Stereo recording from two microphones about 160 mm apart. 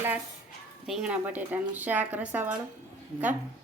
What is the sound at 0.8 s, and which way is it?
A woman's voice, 5° right (ahead or behind).